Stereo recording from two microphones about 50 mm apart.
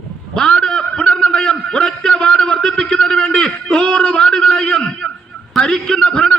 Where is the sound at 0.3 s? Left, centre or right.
Centre.